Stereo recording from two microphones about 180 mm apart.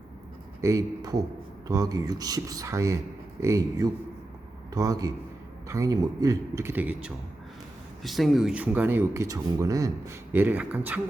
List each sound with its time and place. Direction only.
0.6 s speech: 15° right (ahead or behind)